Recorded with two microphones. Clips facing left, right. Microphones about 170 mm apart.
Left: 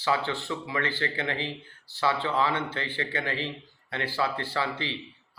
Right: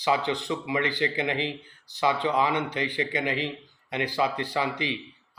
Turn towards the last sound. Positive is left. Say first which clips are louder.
# right 3 dB
turn(degrees=-15)  # may be behind; listen again after turning